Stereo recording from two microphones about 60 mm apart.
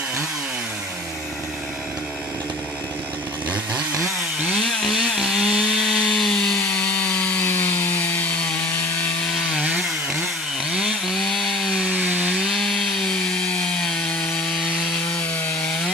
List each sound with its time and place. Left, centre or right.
4.6 s chainsaw: centre
5.9 s wood: centre; by 8.3 s left
10.7 s chainsaw: centre
11.9 s chainsaw: right
12.4 s wood: centre